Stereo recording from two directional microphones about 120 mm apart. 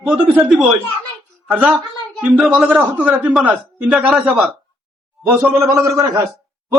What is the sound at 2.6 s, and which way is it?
A man's voice, 15° right (ahead or behind).